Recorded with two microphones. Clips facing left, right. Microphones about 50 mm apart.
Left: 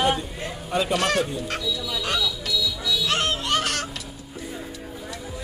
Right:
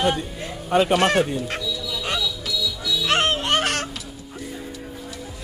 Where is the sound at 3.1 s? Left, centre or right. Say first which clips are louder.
Right 5 dB; right.